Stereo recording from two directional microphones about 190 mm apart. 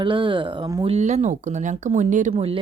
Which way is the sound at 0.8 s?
35° right (ahead or behind).